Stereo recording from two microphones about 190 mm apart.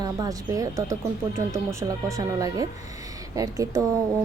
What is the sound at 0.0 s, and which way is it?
A woman's voice, 20° right (ahead or behind).